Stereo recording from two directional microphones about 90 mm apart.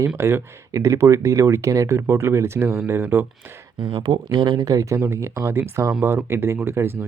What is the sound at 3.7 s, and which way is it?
Speech, 60° right (ahead or behind).